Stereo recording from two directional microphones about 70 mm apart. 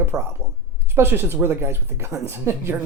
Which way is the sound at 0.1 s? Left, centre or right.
Right.